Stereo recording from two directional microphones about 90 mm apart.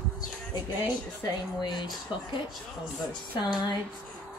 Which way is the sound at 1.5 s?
55° left (ahead or behind).